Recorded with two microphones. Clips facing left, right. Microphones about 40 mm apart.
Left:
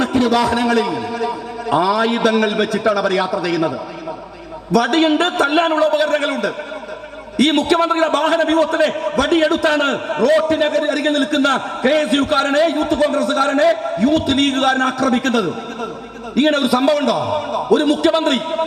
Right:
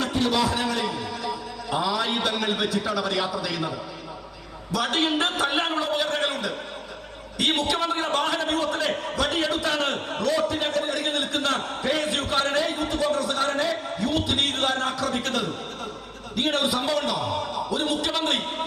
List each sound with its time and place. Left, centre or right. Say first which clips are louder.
0.3 s a man's voice: left 9 dB; left
4.7 s a man's voice: left 10 dB; left